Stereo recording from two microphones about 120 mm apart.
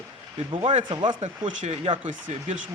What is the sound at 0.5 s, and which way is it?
Speech, 45° right (ahead or behind).